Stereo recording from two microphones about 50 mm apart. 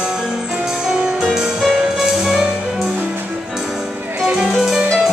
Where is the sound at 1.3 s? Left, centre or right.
Centre.